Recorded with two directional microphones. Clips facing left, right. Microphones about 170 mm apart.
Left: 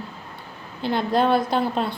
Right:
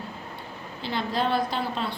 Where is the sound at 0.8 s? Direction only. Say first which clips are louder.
Left 7 dB; 50° left (ahead or behind).